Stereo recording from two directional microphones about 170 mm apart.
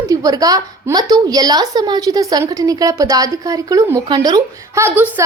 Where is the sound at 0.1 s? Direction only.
20° right (ahead or behind).